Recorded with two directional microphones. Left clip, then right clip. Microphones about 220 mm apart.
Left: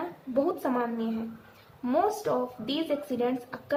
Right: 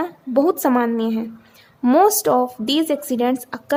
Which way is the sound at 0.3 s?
50° right (ahead or behind).